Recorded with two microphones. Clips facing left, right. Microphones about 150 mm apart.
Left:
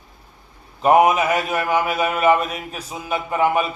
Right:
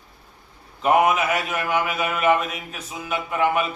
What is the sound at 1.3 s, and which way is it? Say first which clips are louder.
A man's voice: left 3 dB; 35° left (ahead or behind).